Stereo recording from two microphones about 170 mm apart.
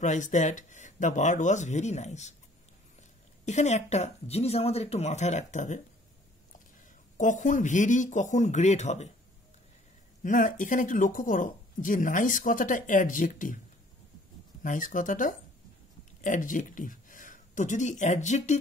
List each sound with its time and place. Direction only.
0.0 s speech: 45° left (ahead or behind)
3.4 s speech: 45° left (ahead or behind)
7.2 s speech: 45° left (ahead or behind)
10.2 s speech: 50° left (ahead or behind)
14.6 s speech: 50° left (ahead or behind)